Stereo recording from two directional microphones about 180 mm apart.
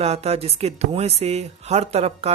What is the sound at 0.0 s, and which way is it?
A man's voice, 35° right (ahead or behind).